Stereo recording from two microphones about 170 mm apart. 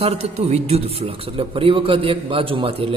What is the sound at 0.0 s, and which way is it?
A man's voice, 40° right (ahead or behind).